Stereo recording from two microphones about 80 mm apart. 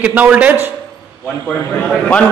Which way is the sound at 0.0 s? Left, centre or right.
Centre.